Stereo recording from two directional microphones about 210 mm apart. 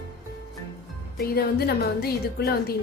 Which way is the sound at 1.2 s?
50° left (ahead or behind).